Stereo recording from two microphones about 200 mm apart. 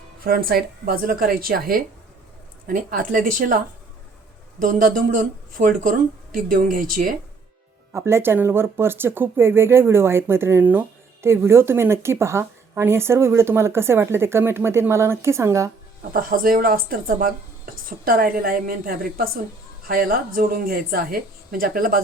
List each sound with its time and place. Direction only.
0.3 s a woman's voice: 50° right (ahead or behind)
4.6 s a woman's voice: 40° right (ahead or behind)
7.9 s speech: 15° right (ahead or behind)
16.1 s a woman's voice: 45° right (ahead or behind)